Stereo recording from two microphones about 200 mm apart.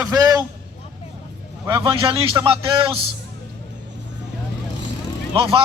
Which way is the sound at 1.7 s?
25° right (ahead or behind).